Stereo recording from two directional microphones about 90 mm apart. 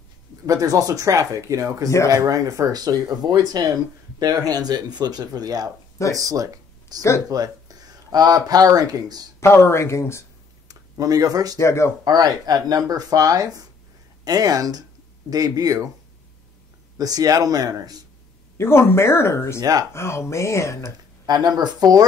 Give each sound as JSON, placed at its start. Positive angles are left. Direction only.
{"t": 0.5, "sound": "speech", "side_deg": -40}
{"t": 7.0, "sound": "speech", "side_deg": 35}
{"t": 7.2, "sound": "speech", "side_deg": -45}
{"t": 9.4, "sound": "speech", "side_deg": 30}
{"t": 10.7, "sound": "speech", "side_deg": -45}
{"t": 11.5, "sound": "speech", "side_deg": 30}
{"t": 12.0, "sound": "speech", "side_deg": -45}
{"t": 17.0, "sound": "speech", "side_deg": -45}
{"t": 18.6, "sound": "speech", "side_deg": 25}
{"t": 19.6, "sound": "speech", "side_deg": -45}
{"t": 19.9, "sound": "speech", "side_deg": 30}
{"t": 21.3, "sound": "speech", "side_deg": -50}